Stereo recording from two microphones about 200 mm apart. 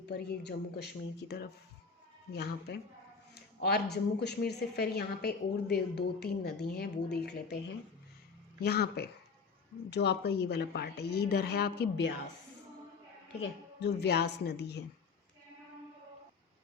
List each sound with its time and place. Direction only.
0.0 s a woman's voice: 55° left (ahead or behind)
2.3 s a woman's voice: 55° left (ahead or behind)
8.6 s a woman's voice: 55° left (ahead or behind)
13.4 s a woman's voice: 55° left (ahead or behind)